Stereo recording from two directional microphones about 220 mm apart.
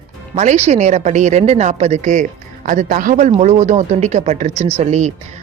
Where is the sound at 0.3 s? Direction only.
30° right (ahead or behind).